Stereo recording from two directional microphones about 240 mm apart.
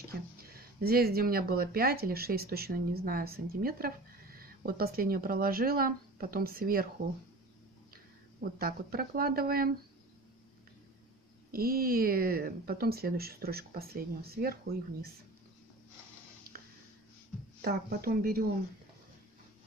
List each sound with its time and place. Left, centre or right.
0.4 s speech: right
7.9 s speech: right
11.5 s speech: right
17.6 s speech: right